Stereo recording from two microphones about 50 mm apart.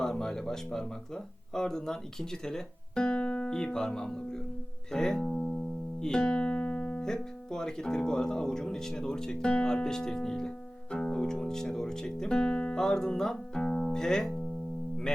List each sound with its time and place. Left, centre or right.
0.0 s speech: centre
3.5 s speech: centre
4.9 s music: centre
6.0 s speech: centre
13.7 s music: centre